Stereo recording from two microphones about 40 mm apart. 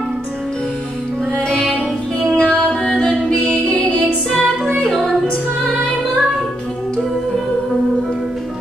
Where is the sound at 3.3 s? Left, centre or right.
Left.